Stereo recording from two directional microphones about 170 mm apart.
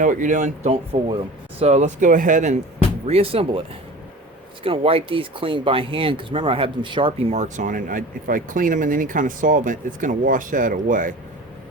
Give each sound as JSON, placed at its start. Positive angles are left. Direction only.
{"t": 0.0, "sound": "speech", "side_deg": -50}
{"t": 0.7, "sound": "speech", "side_deg": -30}
{"t": 3.1, "sound": "speech", "side_deg": -35}
{"t": 4.6, "sound": "speech", "side_deg": -35}